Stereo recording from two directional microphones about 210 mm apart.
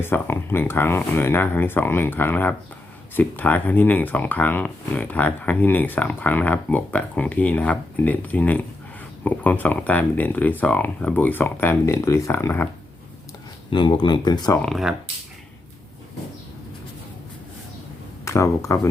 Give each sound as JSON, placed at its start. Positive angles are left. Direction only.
{"t": 0.0, "sound": "speech", "side_deg": 10}
{"t": 13.7, "sound": "speech", "side_deg": 20}
{"t": 14.6, "sound": "speech", "side_deg": 0}
{"t": 18.3, "sound": "speech", "side_deg": 15}